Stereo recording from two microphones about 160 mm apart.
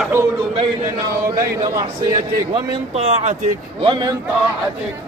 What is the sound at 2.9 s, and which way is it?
Speech, 45° right (ahead or behind).